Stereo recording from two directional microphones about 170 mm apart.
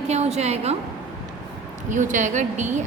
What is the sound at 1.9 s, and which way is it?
Speech, 50° right (ahead or behind).